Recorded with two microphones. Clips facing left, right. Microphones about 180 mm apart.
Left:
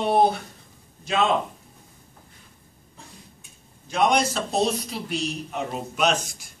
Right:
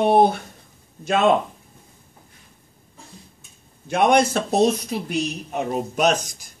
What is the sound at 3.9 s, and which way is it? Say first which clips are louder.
Speech: right 4 dB; 55° right (ahead or behind).